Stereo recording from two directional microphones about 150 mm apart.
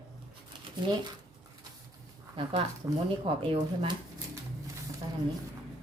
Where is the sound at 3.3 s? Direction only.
35° right (ahead or behind).